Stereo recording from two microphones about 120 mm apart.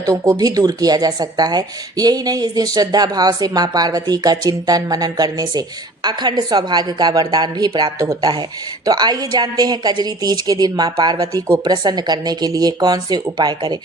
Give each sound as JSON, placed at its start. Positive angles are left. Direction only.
{"t": 0.0, "sound": "speech", "side_deg": -30}
{"t": 7.9, "sound": "speech", "side_deg": -25}